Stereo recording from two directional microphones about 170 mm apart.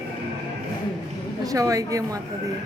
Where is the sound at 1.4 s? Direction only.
20° right (ahead or behind).